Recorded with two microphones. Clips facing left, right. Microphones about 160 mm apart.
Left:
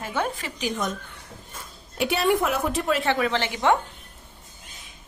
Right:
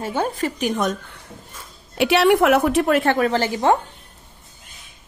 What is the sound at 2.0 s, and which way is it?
A woman's voice, 75° right (ahead or behind).